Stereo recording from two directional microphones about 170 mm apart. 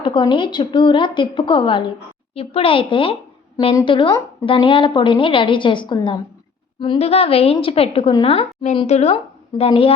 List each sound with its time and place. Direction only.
0.0 s a woman's voice: 25° left (ahead or behind)